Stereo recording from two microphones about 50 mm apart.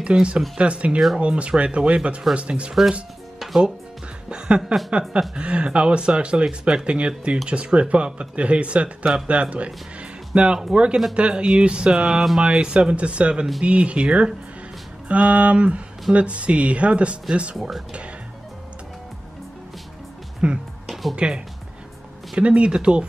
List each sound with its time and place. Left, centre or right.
0.0 s speech: right
4.3 s a sound: centre
5.3 s speech: right
17.6 s speech: centre
20.4 s speech: right
20.8 s music: centre
22.4 s speech: right